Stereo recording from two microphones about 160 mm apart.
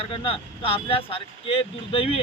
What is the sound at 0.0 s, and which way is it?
Speech, 35° left (ahead or behind).